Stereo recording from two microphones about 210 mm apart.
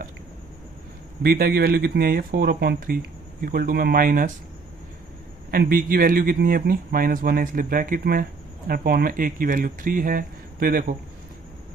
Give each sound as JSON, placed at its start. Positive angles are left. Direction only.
{"t": 1.2, "sound": "speech", "side_deg": -45}
{"t": 5.5, "sound": "speech", "side_deg": -45}